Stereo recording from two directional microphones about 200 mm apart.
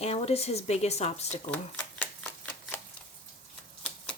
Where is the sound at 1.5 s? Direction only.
10° left (ahead or behind).